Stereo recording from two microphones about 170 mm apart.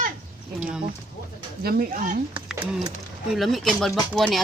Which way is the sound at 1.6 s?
60° right (ahead or behind).